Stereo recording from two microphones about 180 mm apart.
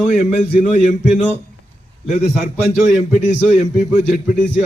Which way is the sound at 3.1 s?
40° left (ahead or behind).